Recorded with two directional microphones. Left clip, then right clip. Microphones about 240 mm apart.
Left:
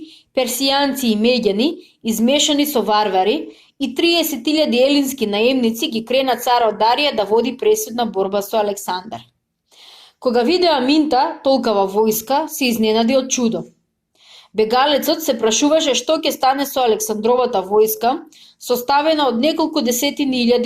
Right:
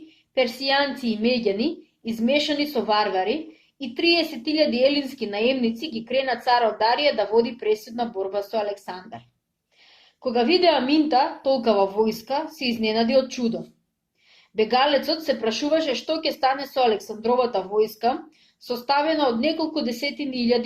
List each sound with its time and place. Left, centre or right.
0.3 s a woman's voice: left